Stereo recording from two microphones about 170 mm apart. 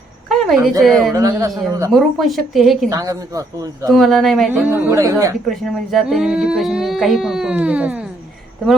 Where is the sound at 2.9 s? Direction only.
20° right (ahead or behind).